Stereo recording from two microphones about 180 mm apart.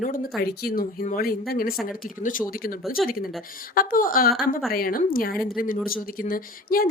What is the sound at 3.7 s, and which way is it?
Speech, 50° left (ahead or behind).